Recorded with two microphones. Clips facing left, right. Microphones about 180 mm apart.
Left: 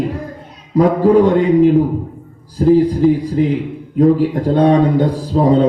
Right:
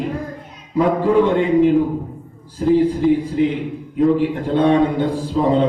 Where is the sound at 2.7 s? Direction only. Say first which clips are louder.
Left 3 dB; 40° left (ahead or behind).